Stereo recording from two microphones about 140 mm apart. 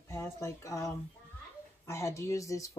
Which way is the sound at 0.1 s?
20° left (ahead or behind).